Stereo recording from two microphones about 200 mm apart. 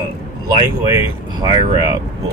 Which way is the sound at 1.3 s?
20° right (ahead or behind).